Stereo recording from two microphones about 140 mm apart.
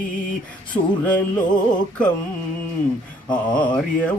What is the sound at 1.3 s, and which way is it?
Music, 30° left (ahead or behind).